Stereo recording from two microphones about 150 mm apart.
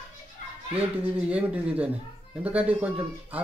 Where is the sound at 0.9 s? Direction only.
10° right (ahead or behind).